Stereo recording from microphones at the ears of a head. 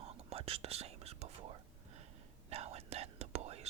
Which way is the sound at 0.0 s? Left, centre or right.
Right.